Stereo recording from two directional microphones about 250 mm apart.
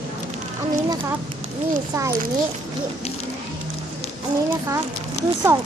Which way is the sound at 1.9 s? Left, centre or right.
Centre.